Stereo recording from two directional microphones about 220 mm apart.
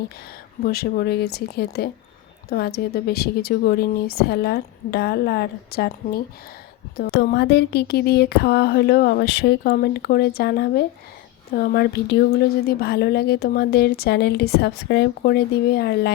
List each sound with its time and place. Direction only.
0.6 s speech: 45° left (ahead or behind)